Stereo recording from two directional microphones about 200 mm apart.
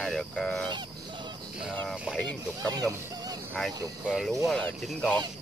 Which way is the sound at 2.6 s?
20° right (ahead or behind).